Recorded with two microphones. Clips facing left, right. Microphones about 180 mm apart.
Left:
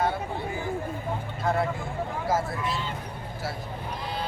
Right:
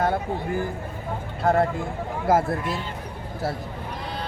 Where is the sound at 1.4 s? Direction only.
55° right (ahead or behind).